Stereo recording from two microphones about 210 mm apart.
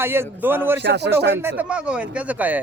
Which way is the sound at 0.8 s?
55° right (ahead or behind).